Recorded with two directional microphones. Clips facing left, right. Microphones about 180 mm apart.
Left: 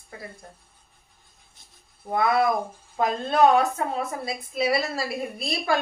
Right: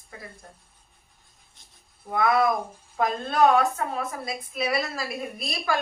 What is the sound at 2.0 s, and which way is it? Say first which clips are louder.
Speech: left 1 dB; 30° left (ahead or behind).